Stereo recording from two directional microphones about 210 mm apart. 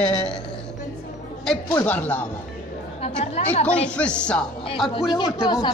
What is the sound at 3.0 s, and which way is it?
Speech, 30° left (ahead or behind).